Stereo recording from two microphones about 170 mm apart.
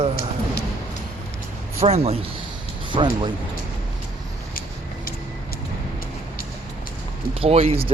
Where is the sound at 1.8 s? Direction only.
35° right (ahead or behind).